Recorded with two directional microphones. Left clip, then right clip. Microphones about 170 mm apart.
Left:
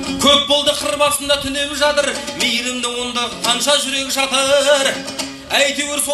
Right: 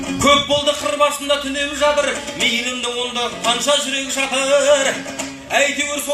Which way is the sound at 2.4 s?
30° left (ahead or behind).